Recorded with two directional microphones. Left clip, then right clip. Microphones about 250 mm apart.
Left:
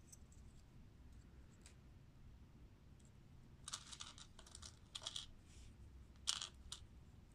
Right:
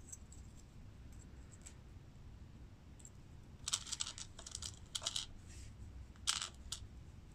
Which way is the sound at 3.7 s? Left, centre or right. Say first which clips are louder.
Right 11 dB; centre.